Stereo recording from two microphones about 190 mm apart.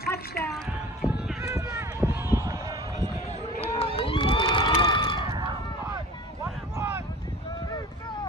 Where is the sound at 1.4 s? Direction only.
15° right (ahead or behind).